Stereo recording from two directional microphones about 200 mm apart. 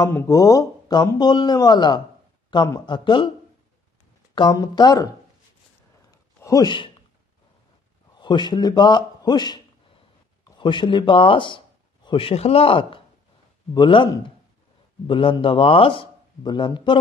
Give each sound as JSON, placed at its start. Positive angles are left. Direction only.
{"t": 0.0, "sound": "speech", "side_deg": 15}
{"t": 4.4, "sound": "speech", "side_deg": 20}
{"t": 6.4, "sound": "speech", "side_deg": 20}
{"t": 8.2, "sound": "a man's voice", "side_deg": 25}